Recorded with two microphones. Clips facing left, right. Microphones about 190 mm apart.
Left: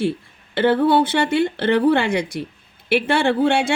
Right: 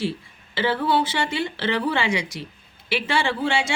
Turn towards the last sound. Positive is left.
turn(degrees=60)  # may be behind; listen again after turning